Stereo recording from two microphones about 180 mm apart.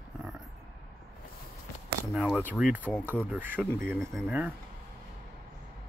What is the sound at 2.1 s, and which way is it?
Speech, 5° right (ahead or behind).